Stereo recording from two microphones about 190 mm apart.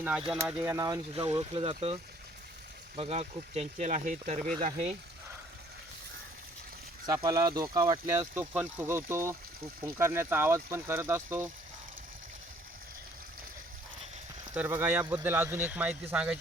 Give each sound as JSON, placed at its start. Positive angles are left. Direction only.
{"t": 0.0, "sound": "speech", "side_deg": -5}
{"t": 0.4, "sound": "speech", "side_deg": -15}
{"t": 7.1, "sound": "speech", "side_deg": -20}
{"t": 14.5, "sound": "speech", "side_deg": -10}